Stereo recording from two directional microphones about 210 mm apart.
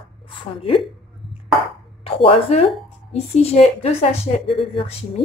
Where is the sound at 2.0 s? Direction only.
25° left (ahead or behind).